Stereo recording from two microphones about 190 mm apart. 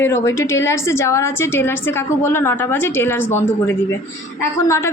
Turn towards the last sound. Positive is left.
turn(degrees=15)  # may be behind; listen again after turning